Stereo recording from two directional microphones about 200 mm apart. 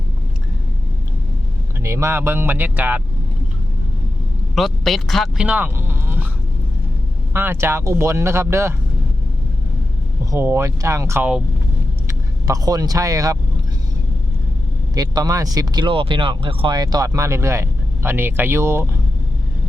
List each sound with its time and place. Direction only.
1.8 s speech: 15° right (ahead or behind)
4.5 s speech: centre (ahead or behind)
7.3 s speech: 10° right (ahead or behind)
10.3 s speech: 15° right (ahead or behind)
12.0 s speech: 20° right (ahead or behind)
14.9 s speech: 20° right (ahead or behind)